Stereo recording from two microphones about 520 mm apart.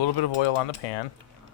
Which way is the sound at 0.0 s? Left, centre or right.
Left.